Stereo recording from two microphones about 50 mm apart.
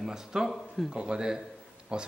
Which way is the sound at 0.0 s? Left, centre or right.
Centre.